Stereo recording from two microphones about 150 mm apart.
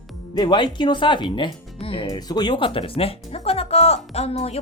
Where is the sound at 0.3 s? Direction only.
30° left (ahead or behind).